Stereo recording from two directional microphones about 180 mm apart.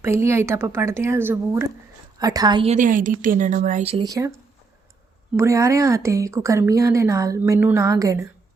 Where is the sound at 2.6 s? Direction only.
40° right (ahead or behind).